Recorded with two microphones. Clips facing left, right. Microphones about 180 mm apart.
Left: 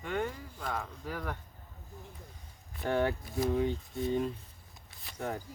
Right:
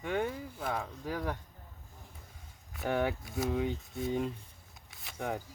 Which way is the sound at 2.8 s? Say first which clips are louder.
Left 1 dB; 5° right (ahead or behind).